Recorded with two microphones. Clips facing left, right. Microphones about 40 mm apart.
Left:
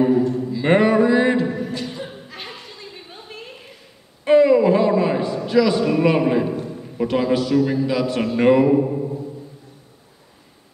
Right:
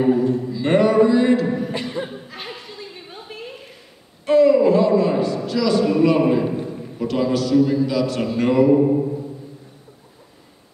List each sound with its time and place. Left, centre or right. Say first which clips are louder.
0.2 s a man's voice: right 1 dB; centre
0.5 s a sound: left 1 dB; centre
1.7 s a capella: right 3 dB; right
2.0 s chuckle: right 2 dB; centre
4.2 s a sound: even; centre
7.0 s a man's voice: left 1 dB; left
8.7 s mantra: right 3 dB; centre